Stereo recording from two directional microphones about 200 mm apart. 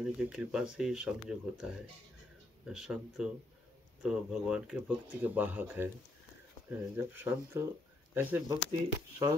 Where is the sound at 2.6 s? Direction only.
5° right (ahead or behind).